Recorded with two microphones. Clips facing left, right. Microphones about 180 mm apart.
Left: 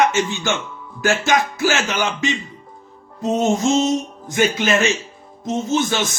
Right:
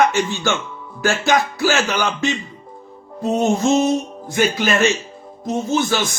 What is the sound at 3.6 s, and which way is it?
Music, 15° right (ahead or behind).